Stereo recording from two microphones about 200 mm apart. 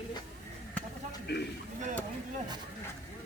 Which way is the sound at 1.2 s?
55° left (ahead or behind).